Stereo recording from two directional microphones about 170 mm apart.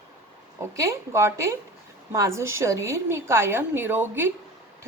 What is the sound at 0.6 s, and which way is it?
A woman's voice, 15° right (ahead or behind).